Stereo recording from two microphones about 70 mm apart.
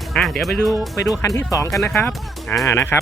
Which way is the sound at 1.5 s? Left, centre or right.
Left.